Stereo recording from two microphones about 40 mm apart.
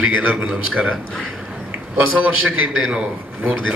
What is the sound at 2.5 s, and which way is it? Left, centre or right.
Speech, right.